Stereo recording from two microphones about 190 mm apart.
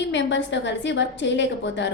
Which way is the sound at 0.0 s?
70° left (ahead or behind).